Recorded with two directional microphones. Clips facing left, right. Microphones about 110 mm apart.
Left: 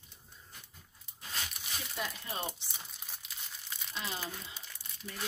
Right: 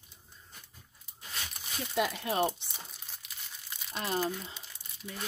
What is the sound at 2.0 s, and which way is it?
Speech, 85° right.